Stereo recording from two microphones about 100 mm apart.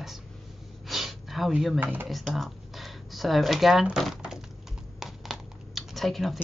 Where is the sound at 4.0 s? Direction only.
5° right (ahead or behind).